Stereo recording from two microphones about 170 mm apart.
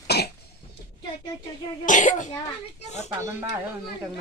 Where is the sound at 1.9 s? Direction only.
50° left (ahead or behind).